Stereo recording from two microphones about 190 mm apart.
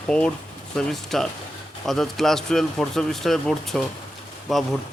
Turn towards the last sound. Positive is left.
turn(degrees=0)  # may be behind; listen again after turning